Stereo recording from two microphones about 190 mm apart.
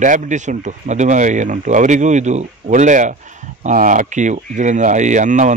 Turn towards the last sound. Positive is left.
turn(degrees=-40)  # may be behind; listen again after turning